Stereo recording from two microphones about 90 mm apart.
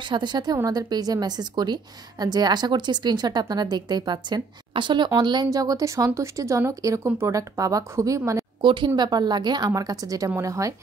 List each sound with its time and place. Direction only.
0.1 s a woman's voice: 55° right (ahead or behind)
5.5 s speech: 45° right (ahead or behind)
8.5 s a woman's voice: 60° right (ahead or behind); by 10.7 s 35° right (ahead or behind)